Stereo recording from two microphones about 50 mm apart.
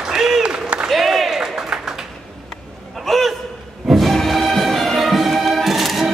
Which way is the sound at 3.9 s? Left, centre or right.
Centre.